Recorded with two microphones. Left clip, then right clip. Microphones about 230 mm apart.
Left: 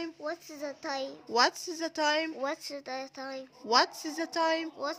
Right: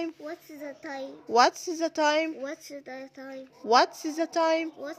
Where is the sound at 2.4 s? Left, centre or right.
Left.